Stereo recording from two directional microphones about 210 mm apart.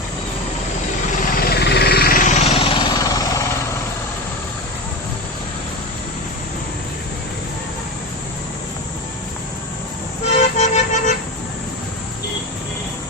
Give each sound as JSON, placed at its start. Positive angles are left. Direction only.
{"t": 1.4, "sound": "vehicle", "side_deg": 50}
{"t": 2.4, "sound": "vehicle", "side_deg": 30}
{"t": 10.2, "sound": "music", "side_deg": 30}